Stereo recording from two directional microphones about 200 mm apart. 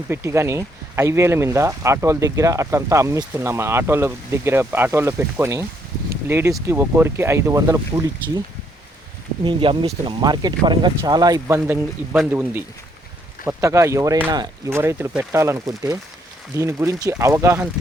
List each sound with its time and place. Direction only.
0.1 s speech: 15° right (ahead or behind)
9.4 s speech: 25° right (ahead or behind)